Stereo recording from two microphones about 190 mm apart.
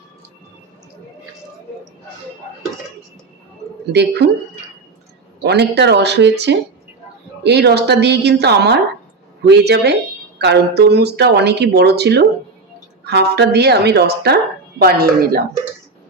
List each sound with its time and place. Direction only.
3.9 s speech: 60° right (ahead or behind)
5.4 s speech: 60° right (ahead or behind)